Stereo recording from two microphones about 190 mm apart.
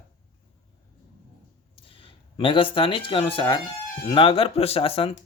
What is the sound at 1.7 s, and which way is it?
Speech, 30° left (ahead or behind).